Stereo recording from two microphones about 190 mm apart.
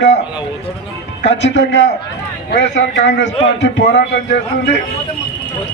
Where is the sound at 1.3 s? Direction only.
70° left (ahead or behind).